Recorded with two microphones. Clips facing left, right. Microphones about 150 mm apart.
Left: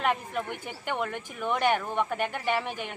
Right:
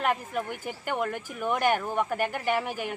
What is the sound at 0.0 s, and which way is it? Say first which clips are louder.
A woman's voice: right 1 dB; 5° right (ahead or behind).